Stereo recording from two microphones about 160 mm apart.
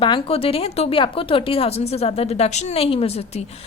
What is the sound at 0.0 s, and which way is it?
A woman's voice, 35° left (ahead or behind).